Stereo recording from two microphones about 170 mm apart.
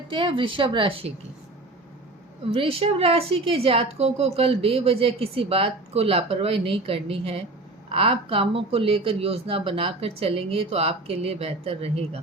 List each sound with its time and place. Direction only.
0.1 s speech: 30° right (ahead or behind)
2.5 s speech: 35° right (ahead or behind)